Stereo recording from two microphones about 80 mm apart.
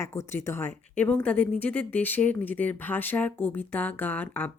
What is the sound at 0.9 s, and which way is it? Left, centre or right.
Speech, centre.